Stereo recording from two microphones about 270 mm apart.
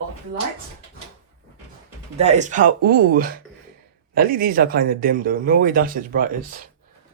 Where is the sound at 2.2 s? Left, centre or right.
Right.